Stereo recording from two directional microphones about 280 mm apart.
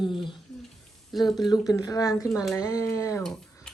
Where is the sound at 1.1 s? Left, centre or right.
Centre.